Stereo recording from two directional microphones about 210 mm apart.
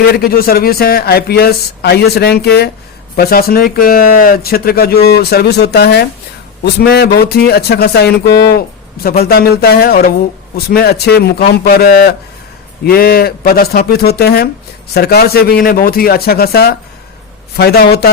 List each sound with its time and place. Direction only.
0.1 s speech: 45° left (ahead or behind)